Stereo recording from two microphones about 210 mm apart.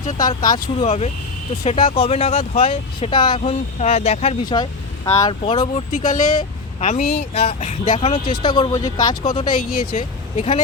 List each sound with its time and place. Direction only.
0.2 s speech: 20° left (ahead or behind)